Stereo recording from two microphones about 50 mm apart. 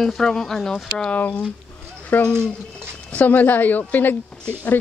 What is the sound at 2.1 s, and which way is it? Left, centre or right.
A woman's voice, left.